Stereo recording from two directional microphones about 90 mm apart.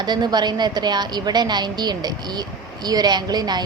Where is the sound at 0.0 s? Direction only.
55° right (ahead or behind).